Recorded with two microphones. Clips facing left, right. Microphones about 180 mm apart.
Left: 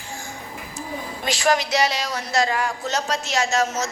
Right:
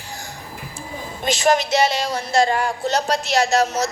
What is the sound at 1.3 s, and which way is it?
A woman's voice, 25° right (ahead or behind).